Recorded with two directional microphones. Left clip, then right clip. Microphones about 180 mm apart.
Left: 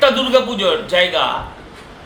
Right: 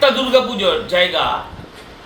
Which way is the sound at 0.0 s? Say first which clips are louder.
Even; 5° left (ahead or behind).